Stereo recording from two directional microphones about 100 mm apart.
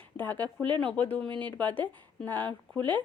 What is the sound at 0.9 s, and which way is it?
Speech, 15° left (ahead or behind).